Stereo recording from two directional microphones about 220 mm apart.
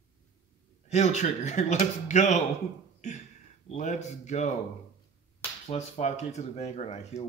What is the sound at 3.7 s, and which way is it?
Speech, 30° left (ahead or behind).